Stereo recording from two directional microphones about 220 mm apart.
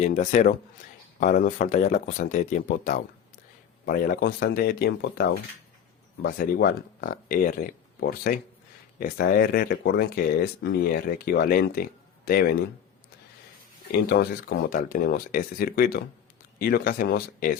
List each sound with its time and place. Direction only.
0.0 s speech: 35° left (ahead or behind)
14.1 s speech: 45° left (ahead or behind)